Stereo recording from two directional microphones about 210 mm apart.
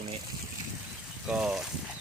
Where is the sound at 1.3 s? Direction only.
5° right (ahead or behind).